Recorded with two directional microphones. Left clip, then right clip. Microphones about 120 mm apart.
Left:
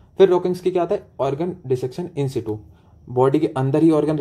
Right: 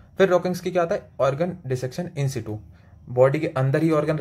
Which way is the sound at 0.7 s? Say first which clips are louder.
Left 1 dB; 40° right (ahead or behind).